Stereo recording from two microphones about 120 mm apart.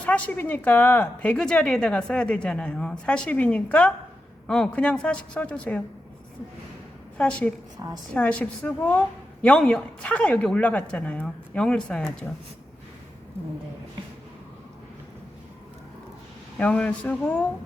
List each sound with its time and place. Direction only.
0.0 s a woman's voice: 10° left (ahead or behind)
7.2 s a woman's voice: 10° left (ahead or behind)
7.8 s a woman's voice: 40° right (ahead or behind)
8.1 s a woman's voice: 10° left (ahead or behind)
16.6 s a woman's voice: 10° left (ahead or behind)